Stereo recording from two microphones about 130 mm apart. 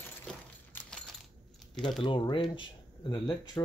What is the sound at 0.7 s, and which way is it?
Coin, 5° left (ahead or behind).